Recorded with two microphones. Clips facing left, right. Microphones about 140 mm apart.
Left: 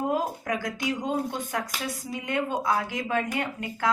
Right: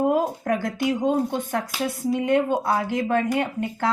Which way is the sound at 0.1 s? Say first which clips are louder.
Right 5 dB; 55° right (ahead or behind).